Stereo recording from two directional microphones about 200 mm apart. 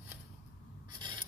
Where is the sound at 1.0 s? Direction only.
20° right (ahead or behind).